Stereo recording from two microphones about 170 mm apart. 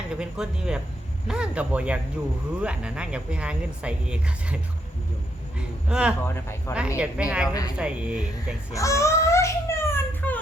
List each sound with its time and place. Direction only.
0.2 s speech: 5° right (ahead or behind)
6.2 s speech: 15° left (ahead or behind)
6.7 s speech: 10° right (ahead or behind)
8.7 s a sound: 20° left (ahead or behind)